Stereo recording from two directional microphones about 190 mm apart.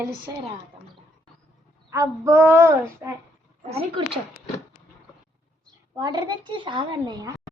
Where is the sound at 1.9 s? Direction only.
15° right (ahead or behind).